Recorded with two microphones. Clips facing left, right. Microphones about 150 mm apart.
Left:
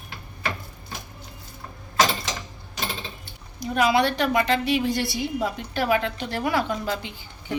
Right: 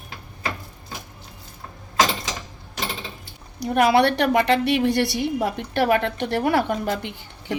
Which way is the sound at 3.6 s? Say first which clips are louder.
Right 4 dB; 65° right (ahead or behind).